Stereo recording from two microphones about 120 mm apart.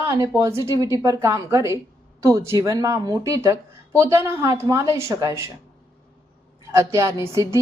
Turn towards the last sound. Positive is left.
turn(degrees=-25)  # may be behind; listen again after turning